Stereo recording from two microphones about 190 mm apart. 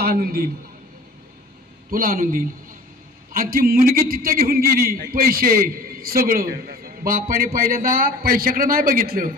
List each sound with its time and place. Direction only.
0.0 s a man's voice: 50° right (ahead or behind)
1.9 s a man's voice: 50° right (ahead or behind)